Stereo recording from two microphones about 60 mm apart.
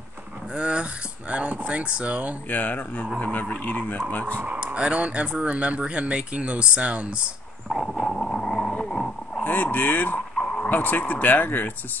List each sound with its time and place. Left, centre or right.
0.6 s speech: right
2.5 s speech: left
4.7 s speech: centre
7.7 s dog: centre
8.1 s vehicle: centre
8.8 s a sound: centre
9.4 s speech: left
10.3 s vehicle: centre
10.7 s speech: left